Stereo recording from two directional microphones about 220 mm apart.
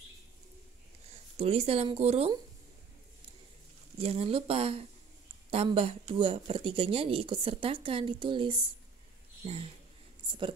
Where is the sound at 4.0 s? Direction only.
25° right (ahead or behind).